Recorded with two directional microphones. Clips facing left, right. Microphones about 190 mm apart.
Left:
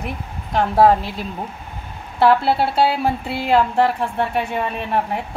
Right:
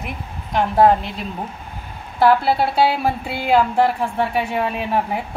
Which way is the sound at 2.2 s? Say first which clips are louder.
Even; 5° right (ahead or behind).